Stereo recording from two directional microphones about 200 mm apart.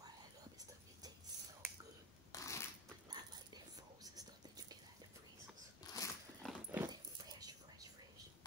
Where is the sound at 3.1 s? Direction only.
20° right (ahead or behind).